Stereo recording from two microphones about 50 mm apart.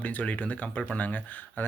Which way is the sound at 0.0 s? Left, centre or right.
Left.